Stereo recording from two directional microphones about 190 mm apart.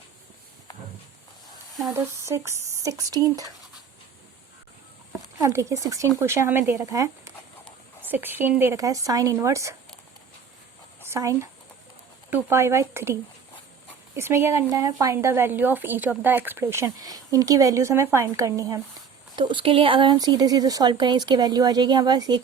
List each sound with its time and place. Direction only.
1.9 s a woman's voice: 15° right (ahead or behind)
5.4 s a woman's voice: 15° right (ahead or behind)
11.1 s a woman's voice: 15° right (ahead or behind)